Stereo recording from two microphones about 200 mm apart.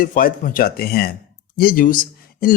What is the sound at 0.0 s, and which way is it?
Speech, 45° left (ahead or behind).